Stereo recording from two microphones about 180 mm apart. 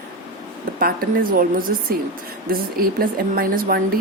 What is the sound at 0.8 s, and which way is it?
A woman's voice, 50° right (ahead or behind).